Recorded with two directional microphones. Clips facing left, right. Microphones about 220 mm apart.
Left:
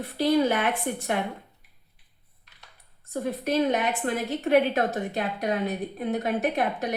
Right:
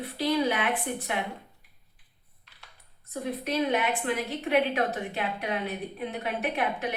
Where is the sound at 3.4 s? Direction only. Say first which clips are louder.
Left 3 dB; 45° left (ahead or behind).